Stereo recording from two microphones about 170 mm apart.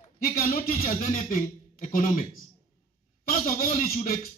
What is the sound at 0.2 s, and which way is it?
Speech, 60° left (ahead or behind).